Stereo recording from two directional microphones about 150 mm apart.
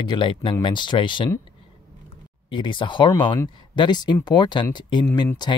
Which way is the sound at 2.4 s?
35° left (ahead or behind).